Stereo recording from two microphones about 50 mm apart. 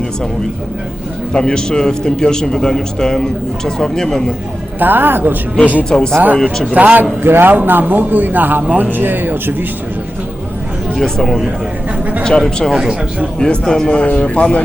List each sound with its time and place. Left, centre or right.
1.3 s a man's voice: centre
4.8 s speech: right
5.9 s a man's voice: centre
6.7 s speech: right
7.3 s speech: right
10.9 s a man's voice: centre
12.7 s speech: centre
13.4 s a man's voice: centre
14.0 s a man's voice: left